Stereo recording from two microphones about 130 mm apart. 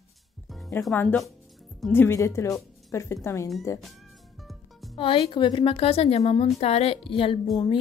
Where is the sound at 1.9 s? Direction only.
20° left (ahead or behind).